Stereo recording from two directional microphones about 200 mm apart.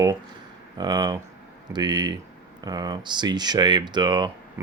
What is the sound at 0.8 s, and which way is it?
Speech, 20° right (ahead or behind).